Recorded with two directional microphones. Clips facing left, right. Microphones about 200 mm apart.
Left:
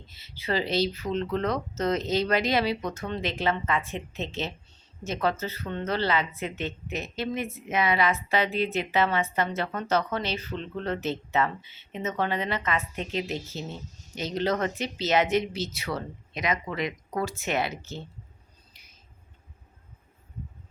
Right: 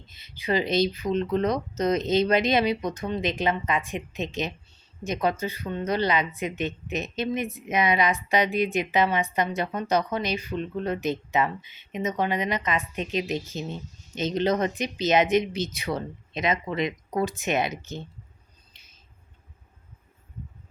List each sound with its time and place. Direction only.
0.1 s speech: 15° right (ahead or behind)